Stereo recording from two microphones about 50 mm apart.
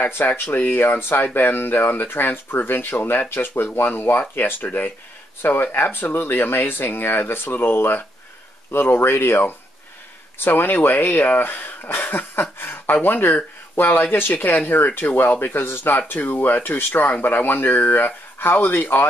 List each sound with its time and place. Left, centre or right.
0.0 s speech: left